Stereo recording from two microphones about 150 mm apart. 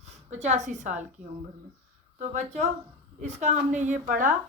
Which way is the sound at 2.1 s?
50° right (ahead or behind).